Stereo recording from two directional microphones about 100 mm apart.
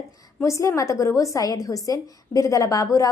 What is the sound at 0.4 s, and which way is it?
A woman's voice, 30° left (ahead or behind).